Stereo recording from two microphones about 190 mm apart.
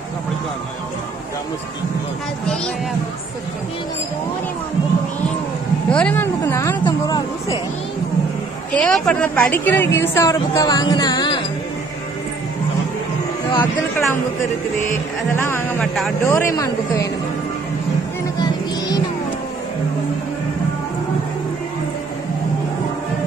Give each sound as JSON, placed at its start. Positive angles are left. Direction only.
{"t": 2.4, "sound": "speech", "side_deg": 5}
{"t": 5.9, "sound": "a woman's voice", "side_deg": 5}
{"t": 8.7, "sound": "a woman's voice", "side_deg": 5}
{"t": 13.6, "sound": "a woman's voice", "side_deg": 10}
{"t": 15.8, "sound": "speech", "side_deg": 0}
{"t": 16.3, "sound": "a woman's voice", "side_deg": 15}
{"t": 18.4, "sound": "music", "side_deg": 20}